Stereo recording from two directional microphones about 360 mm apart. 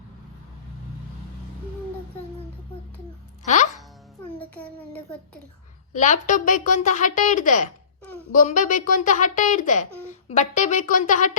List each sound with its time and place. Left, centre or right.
3.4 s speech: centre
4.4 s a child's voice: centre
5.9 s a woman's voice: left